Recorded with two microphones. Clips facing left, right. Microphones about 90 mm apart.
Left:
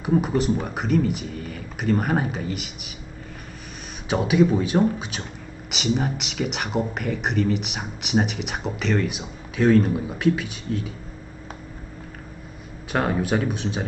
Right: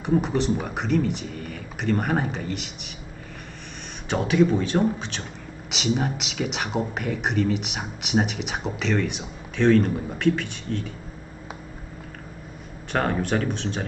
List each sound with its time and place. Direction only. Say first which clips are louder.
0.0 s speech: left 1 dB; 5° left (ahead or behind)
4.1 s speech: left 1 dB; 5° left (ahead or behind)
12.9 s speech: left 1 dB; 5° left (ahead or behind)